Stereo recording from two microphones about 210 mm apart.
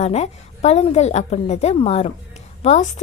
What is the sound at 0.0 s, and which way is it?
A woman's voice, 30° left (ahead or behind).